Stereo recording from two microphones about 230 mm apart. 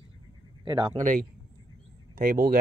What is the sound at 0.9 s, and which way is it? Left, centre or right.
Speech, right.